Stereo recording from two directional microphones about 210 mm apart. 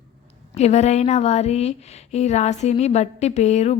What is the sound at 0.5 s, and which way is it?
A woman's voice, 30° left (ahead or behind).